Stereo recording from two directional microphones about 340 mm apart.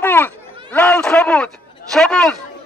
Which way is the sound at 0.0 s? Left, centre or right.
Centre.